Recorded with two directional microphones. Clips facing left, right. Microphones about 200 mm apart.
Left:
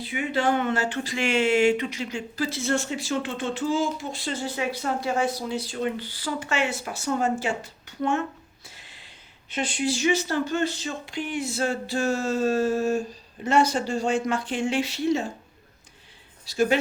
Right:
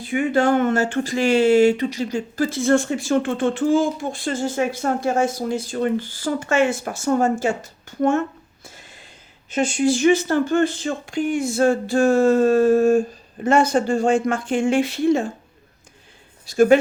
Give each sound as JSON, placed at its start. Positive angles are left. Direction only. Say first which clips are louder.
{"t": 0.0, "sound": "speech", "louder": "right 7 dB", "side_deg": -50}
{"t": 8.6, "sound": "a sound", "louder": "right 6 dB", "side_deg": -45}
{"t": 9.5, "sound": "speech", "louder": "right 8 dB", "side_deg": -45}
{"t": 16.5, "sound": "speech", "louder": "right 8 dB", "side_deg": -50}